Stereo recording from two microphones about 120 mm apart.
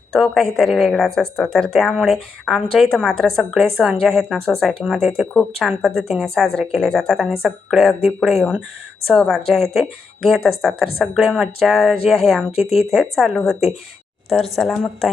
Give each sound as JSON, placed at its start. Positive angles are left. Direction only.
{"t": 0.1, "sound": "speech", "side_deg": 0}
{"t": 5.3, "sound": "speech", "side_deg": 10}
{"t": 5.6, "sound": "speech", "side_deg": 0}